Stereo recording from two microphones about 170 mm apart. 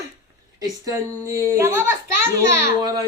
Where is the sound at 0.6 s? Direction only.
20° right (ahead or behind).